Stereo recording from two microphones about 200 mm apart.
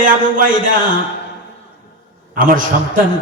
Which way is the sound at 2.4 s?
45° right (ahead or behind).